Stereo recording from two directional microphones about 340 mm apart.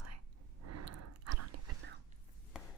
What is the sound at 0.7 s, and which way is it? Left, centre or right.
Chewing, right.